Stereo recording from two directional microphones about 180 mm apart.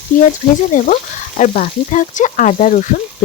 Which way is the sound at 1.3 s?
45° left (ahead or behind).